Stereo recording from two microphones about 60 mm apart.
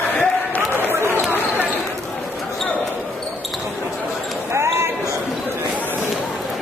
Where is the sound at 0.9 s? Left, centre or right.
Right.